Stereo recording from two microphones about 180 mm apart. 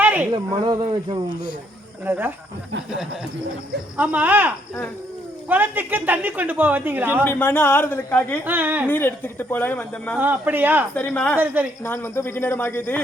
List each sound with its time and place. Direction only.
0.0 s a sound: 10° right (ahead or behind)
0.3 s speech: 25° right (ahead or behind)
2.0 s speech: 10° right (ahead or behind)
3.9 s speech: 10° right (ahead or behind)
7.3 s speech: 10° left (ahead or behind)
8.4 s speech: 10° right (ahead or behind)
8.9 s speech: 10° left (ahead or behind)
10.2 s speech: 10° right (ahead or behind)
10.9 s speech: 10° left (ahead or behind)
11.3 s speech: 10° right (ahead or behind)
11.8 s speech: 15° left (ahead or behind)